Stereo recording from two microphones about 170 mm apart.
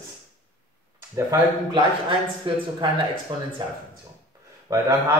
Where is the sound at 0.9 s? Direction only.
20° right (ahead or behind).